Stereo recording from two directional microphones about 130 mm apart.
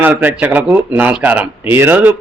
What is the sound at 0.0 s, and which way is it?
A man's voice, 15° right (ahead or behind).